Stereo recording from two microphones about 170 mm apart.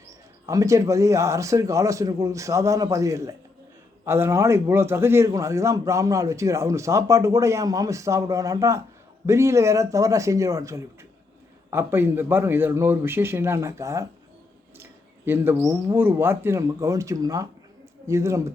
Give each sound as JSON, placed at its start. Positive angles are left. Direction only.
{"t": 0.4, "sound": "a man's voice", "side_deg": -20}